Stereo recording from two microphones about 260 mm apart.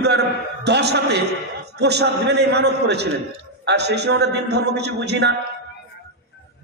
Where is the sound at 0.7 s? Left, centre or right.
Right.